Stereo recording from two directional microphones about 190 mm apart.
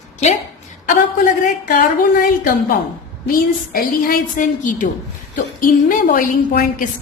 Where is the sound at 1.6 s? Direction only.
45° left (ahead or behind).